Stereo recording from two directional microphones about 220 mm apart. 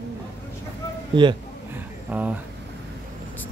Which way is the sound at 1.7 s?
5° right (ahead or behind).